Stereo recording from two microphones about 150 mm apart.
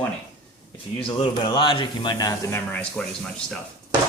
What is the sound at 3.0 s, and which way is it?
Speech, centre (ahead or behind).